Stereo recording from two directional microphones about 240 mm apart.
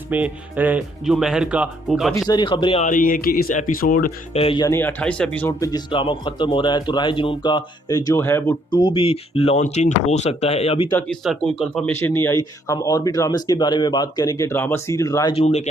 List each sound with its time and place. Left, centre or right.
0.1 s speech: centre
2.1 s speech: centre; by 4.4 s left
4.4 s speech: centre
10.9 s speech: centre; by 15.7 s left